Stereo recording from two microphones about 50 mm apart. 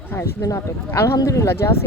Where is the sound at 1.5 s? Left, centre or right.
Left.